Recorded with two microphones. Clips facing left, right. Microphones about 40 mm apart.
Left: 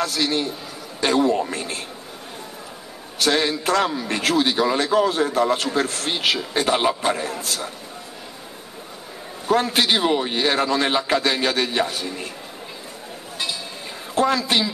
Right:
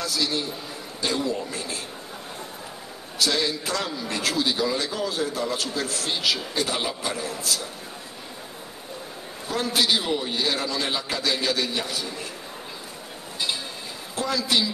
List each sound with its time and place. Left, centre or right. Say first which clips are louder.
0.0 s a man's voice: left 4 dB; left
3.2 s a man's voice: left 4 dB; left
9.5 s a man's voice: left 5 dB; left
14.1 s a man's voice: left 5 dB; left